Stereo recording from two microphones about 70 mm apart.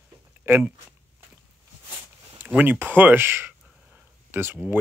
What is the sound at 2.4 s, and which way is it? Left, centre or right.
Speech, centre.